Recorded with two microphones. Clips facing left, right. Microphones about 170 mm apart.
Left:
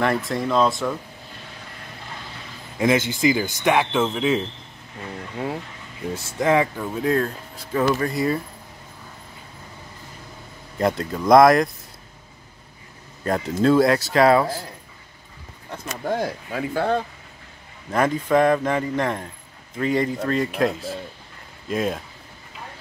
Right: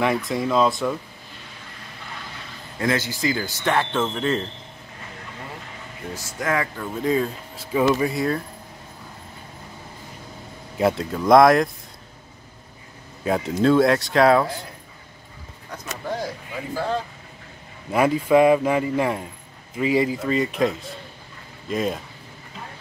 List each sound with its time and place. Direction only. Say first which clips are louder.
0.0 s speech: even; centre (ahead or behind)
2.8 s speech: left 4 dB; 20° left (ahead or behind)
6.1 s speech: left 5 dB; 25° left (ahead or behind)
6.8 s speech: left 1 dB; 5° left (ahead or behind)
10.8 s speech: right 1 dB; centre (ahead or behind)
13.2 s speech: even; centre (ahead or behind)
16.7 s speech: left 3 dB; 60° left (ahead or behind)
17.9 s a man's voice: right 2 dB; 5° right (ahead or behind)